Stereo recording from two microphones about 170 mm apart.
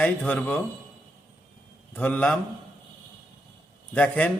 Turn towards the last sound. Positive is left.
turn(degrees=10)  # may be behind; listen again after turning